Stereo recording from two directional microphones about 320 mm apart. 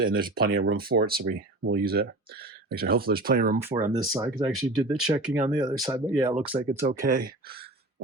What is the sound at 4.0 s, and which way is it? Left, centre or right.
Speech, centre.